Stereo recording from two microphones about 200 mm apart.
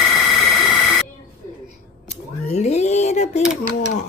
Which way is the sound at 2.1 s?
35° left (ahead or behind).